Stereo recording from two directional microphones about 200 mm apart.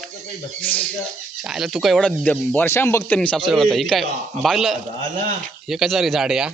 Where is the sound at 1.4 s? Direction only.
Centre (ahead or behind).